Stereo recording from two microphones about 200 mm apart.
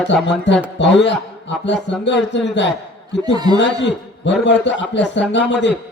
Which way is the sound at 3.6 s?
60° left (ahead or behind).